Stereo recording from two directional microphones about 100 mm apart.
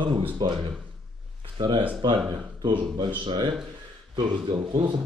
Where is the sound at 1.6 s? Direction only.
60° right (ahead or behind).